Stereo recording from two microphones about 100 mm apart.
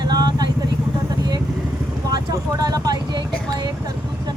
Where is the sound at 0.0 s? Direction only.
45° right (ahead or behind).